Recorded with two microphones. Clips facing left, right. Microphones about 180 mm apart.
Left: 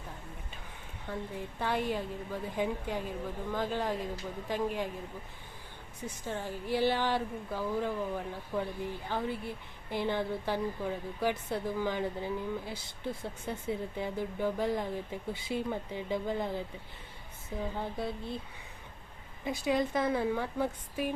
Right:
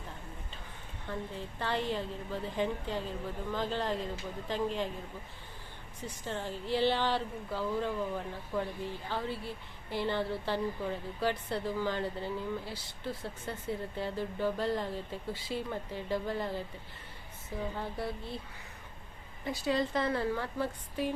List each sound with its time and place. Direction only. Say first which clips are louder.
1.0 s a woman's voice: left 1 dB; 10° left (ahead or behind)
6.2 s a woman's voice: even; 10° left (ahead or behind)
17.7 s a sound: left 1 dB; 20° left (ahead or behind)
19.5 s a woman's voice: left 1 dB; 15° left (ahead or behind)